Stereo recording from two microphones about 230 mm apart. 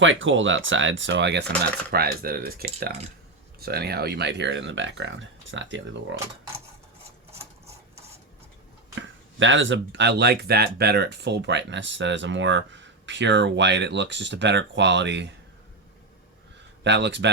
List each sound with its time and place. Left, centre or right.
0.0 s speech: right
9.0 s speech: right
16.8 s speech: right